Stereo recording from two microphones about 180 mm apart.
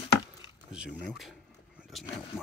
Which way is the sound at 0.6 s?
5° right (ahead or behind).